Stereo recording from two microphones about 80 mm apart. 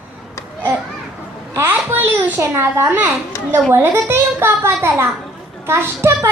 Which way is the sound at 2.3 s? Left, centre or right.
Right.